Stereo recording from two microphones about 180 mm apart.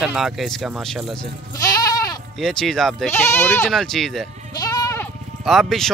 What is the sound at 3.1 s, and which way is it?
Speech, 15° left (ahead or behind).